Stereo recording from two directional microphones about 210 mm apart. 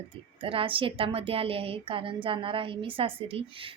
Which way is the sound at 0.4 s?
25° right (ahead or behind).